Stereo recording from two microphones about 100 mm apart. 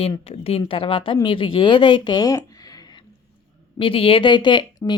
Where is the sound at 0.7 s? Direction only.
65° left (ahead or behind); by 2.4 s 40° left (ahead or behind).